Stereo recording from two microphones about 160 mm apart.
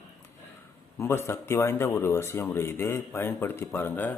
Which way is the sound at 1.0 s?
15° left (ahead or behind).